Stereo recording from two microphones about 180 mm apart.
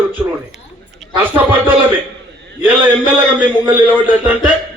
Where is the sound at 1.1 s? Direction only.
10° right (ahead or behind).